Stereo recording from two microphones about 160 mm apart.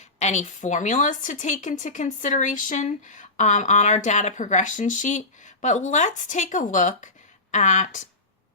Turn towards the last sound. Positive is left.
turn(degrees=50)  # may be behind; listen again after turning